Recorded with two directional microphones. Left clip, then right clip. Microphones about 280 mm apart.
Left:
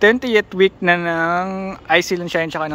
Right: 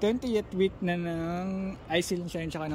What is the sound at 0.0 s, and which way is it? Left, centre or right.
Speech, centre.